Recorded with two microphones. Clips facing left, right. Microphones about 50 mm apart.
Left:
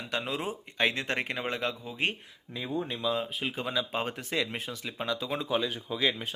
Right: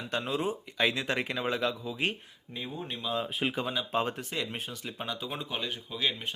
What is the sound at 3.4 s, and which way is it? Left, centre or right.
Speech, right.